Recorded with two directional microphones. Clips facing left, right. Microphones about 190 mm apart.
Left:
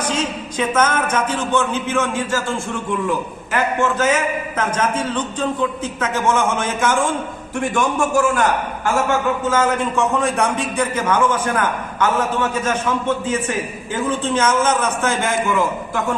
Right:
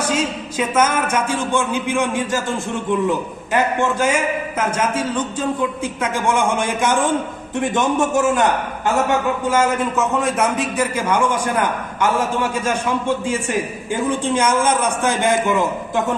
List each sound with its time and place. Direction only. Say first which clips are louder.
0.0 s a man's voice: right 2 dB; 10° right (ahead or behind)
9.5 s speech: right 2 dB; 10° right (ahead or behind)